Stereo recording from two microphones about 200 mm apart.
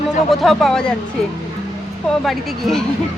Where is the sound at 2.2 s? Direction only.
Centre (ahead or behind).